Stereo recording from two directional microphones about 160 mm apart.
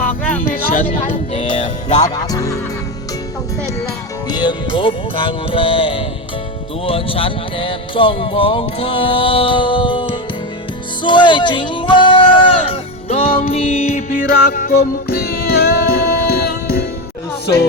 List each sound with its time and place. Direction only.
0.4 s a sound: 60° left (ahead or behind)
1.1 s music: 40° left (ahead or behind)
1.9 s speech: 25° left (ahead or behind)
4.3 s music: 25° left (ahead or behind)
6.8 s speech: 35° left (ahead or behind)
11.0 s a sound: 30° left (ahead or behind)
13.5 s music: 40° left (ahead or behind)
14.1 s music: 65° left (ahead or behind)
17.4 s speech: 90° left